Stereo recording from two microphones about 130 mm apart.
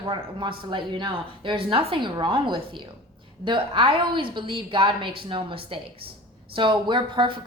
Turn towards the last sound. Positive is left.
turn(degrees=-40)  # may be behind; listen again after turning